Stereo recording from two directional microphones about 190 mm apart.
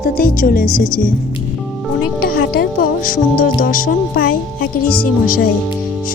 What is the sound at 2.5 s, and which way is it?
Speech, 50° left (ahead or behind).